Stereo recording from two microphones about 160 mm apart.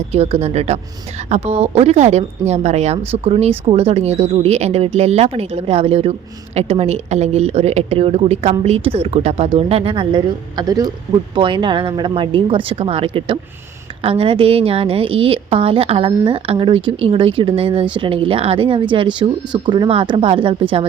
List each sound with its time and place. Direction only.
0.1 s a man's voice: 40° right (ahead or behind)